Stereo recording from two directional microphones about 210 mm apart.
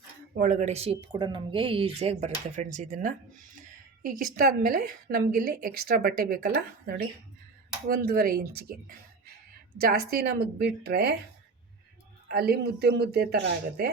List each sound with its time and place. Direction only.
0.3 s a woman's voice: 40° right (ahead or behind)
12.3 s a woman's voice: 50° right (ahead or behind)